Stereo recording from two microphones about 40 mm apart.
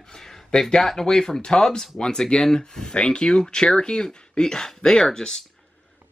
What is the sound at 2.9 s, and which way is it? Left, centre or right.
Speech, left.